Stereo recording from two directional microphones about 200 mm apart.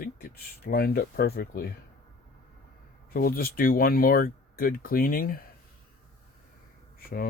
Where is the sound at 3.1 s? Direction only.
45° left (ahead or behind).